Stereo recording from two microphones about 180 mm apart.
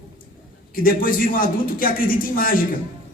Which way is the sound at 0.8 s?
50° left (ahead or behind).